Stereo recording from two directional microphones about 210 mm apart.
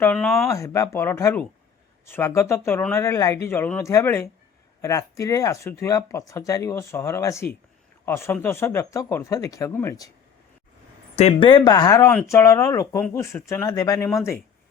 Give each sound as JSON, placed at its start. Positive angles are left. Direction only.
{"t": 0.0, "sound": "speech", "side_deg": 5}
{"t": 0.5, "sound": "speech", "side_deg": 15}
{"t": 11.1, "sound": "speech", "side_deg": 30}